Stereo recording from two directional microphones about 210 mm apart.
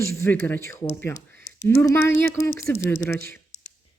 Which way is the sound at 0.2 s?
10° left (ahead or behind).